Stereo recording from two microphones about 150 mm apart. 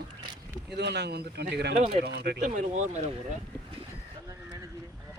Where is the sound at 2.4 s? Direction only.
55° right (ahead or behind).